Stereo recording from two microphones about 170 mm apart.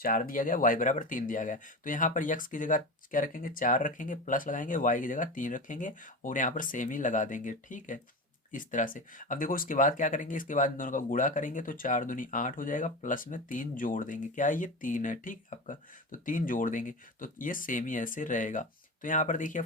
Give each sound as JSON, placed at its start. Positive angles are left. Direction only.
{"t": 0.0, "sound": "speech", "side_deg": 55}